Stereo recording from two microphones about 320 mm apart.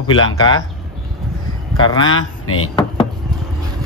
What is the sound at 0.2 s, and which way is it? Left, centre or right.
Speech, centre.